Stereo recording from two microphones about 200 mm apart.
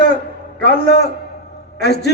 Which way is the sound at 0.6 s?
55° left (ahead or behind).